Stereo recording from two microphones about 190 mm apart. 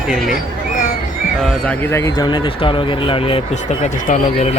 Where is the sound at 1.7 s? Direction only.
15° left (ahead or behind).